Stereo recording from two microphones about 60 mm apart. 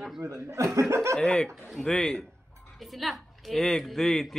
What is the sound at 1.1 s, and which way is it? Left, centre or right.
A woman's voice, centre.